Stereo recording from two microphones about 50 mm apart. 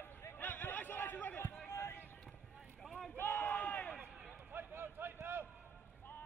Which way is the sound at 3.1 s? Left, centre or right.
Left.